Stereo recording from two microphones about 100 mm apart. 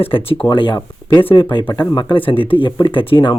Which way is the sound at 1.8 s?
45° left (ahead or behind).